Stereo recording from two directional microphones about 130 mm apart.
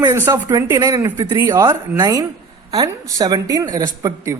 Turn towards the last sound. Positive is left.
turn(degrees=-25)  # may be behind; listen again after turning